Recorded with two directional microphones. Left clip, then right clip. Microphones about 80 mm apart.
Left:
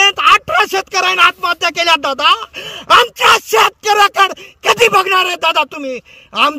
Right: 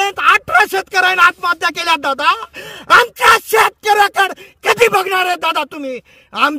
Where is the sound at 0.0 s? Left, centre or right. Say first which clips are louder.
Left 3 dB; right.